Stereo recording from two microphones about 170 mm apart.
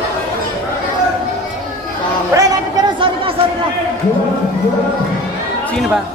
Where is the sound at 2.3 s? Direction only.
20° right (ahead or behind).